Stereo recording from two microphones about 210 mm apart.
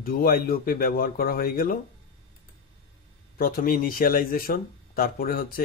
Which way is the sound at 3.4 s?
45° left (ahead or behind).